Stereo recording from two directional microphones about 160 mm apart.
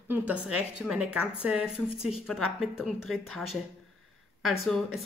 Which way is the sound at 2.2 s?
Centre (ahead or behind).